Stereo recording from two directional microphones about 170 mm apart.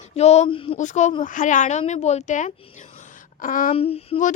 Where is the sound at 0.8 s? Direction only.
45° left (ahead or behind).